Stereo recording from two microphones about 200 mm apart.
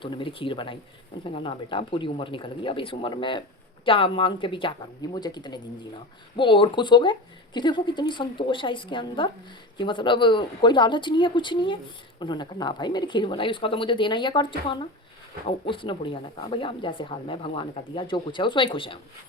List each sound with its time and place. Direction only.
0.0 s speech: 25° left (ahead or behind)